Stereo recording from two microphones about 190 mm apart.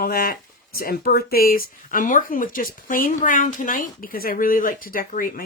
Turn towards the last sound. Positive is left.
turn(degrees=45)  # may be behind; listen again after turning